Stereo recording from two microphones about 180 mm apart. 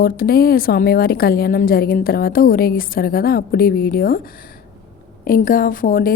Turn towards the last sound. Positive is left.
turn(degrees=50)  # may be behind; listen again after turning